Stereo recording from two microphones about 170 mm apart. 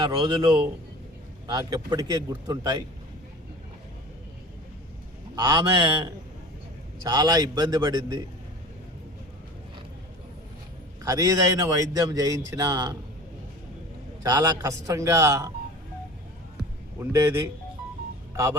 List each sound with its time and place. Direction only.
0.1 s a man's voice: 30° right (ahead or behind)
5.3 s speech: 20° right (ahead or behind)
11.0 s speech: 20° right (ahead or behind)
14.3 s a man's voice: 20° right (ahead or behind)
17.0 s a man's voice: 15° right (ahead or behind)